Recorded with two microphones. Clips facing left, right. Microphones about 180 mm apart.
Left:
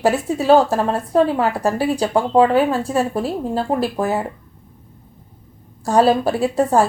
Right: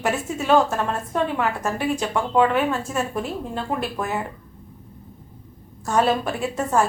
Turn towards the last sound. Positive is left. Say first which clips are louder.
# left 6 dB
turn(degrees=35)  # may be behind; listen again after turning